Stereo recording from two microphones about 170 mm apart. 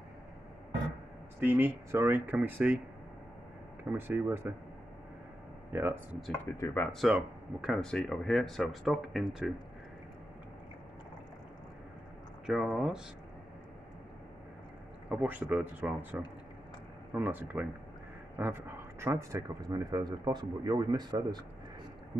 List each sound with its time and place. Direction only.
1.4 s speech: 10° right (ahead or behind)
3.9 s speech: 15° right (ahead or behind)
5.7 s speech: 15° right (ahead or behind)
6.5 s speech: 15° left (ahead or behind)
6.9 s speech: 5° right (ahead or behind)
12.4 s speech: centre (ahead or behind)
15.0 s speech: 10° right (ahead or behind)